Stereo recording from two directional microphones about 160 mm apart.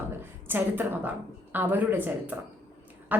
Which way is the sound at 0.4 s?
10° right (ahead or behind).